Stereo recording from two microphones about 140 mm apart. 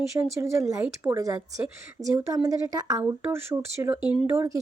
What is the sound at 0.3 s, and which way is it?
A woman's voice, 20° right (ahead or behind).